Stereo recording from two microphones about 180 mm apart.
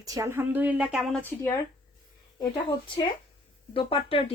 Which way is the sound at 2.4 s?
25° left (ahead or behind).